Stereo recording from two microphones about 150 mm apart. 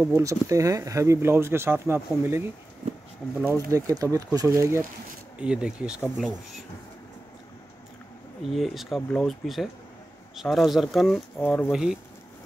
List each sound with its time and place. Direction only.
0.0 s speech: 20° right (ahead or behind)
3.7 s speech: 20° right (ahead or behind)
5.4 s speech: 5° right (ahead or behind)
8.4 s speech: centre (ahead or behind)
11.3 s speech: 10° left (ahead or behind)
11.7 s speech: 5° right (ahead or behind)